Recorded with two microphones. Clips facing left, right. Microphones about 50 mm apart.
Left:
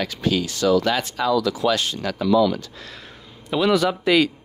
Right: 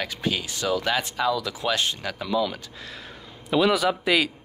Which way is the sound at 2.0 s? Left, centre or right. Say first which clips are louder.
Left 7 dB; centre.